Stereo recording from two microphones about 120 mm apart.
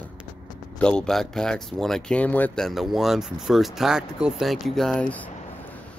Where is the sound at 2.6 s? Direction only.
Centre (ahead or behind).